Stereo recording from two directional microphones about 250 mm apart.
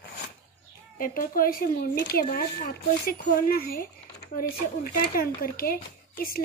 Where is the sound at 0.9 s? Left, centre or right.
Left.